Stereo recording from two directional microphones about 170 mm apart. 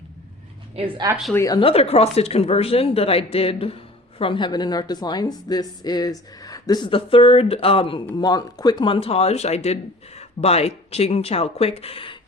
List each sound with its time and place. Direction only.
1.3 s speech: 15° left (ahead or behind)
1.5 s speech: 35° left (ahead or behind)